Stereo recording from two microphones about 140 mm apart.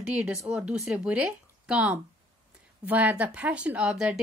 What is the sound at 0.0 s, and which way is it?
A woman's voice, 10° right (ahead or behind).